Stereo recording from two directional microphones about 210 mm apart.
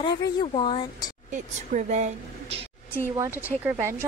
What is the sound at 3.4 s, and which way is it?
Speech, 10° right (ahead or behind).